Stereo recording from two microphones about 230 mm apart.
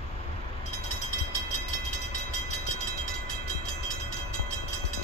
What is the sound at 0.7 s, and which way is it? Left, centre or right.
Train, left.